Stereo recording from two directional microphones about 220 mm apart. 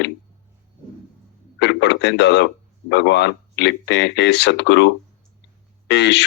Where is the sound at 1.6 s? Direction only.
50° left (ahead or behind).